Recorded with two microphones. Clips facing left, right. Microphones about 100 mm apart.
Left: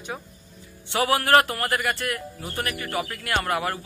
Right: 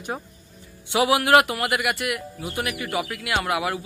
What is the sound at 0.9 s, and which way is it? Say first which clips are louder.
A man's voice: right 2 dB; 15° right (ahead or behind).